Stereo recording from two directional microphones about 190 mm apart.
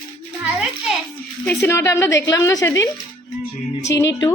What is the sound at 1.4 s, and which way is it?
A woman's voice, 10° left (ahead or behind).